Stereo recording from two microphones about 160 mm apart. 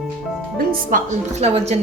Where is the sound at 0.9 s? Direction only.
45° right (ahead or behind).